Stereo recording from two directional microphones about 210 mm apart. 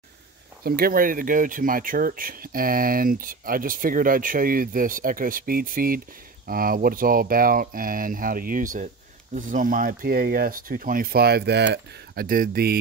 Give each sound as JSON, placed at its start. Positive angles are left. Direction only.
{"t": 0.7, "sound": "speech", "side_deg": -45}